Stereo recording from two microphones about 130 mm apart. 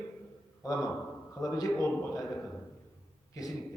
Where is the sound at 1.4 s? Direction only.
25° left (ahead or behind).